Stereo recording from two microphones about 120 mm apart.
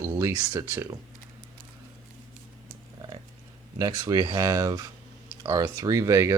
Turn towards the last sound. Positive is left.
turn(degrees=-25)  # may be behind; listen again after turning